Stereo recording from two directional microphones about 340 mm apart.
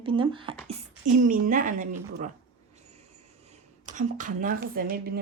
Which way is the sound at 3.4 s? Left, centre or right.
Right.